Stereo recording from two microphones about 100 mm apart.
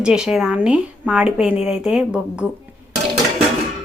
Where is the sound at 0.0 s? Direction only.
5° right (ahead or behind).